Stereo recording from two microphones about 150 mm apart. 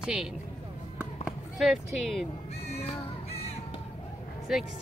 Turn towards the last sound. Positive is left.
turn(degrees=0)  # may be behind; listen again after turning